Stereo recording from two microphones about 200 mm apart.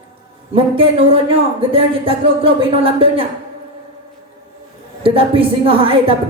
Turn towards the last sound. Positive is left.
turn(degrees=-25)  # may be behind; listen again after turning